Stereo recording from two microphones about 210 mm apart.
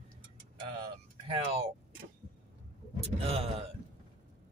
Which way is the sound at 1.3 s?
30° right (ahead or behind).